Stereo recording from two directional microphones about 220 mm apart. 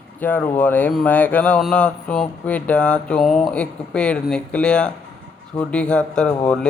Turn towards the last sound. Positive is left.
turn(degrees=5)  # may be behind; listen again after turning